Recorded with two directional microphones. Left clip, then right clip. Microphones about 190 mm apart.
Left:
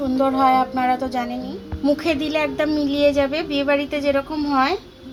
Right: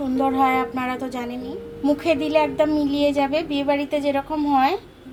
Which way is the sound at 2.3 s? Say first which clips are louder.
Right 2 dB; 25° left (ahead or behind).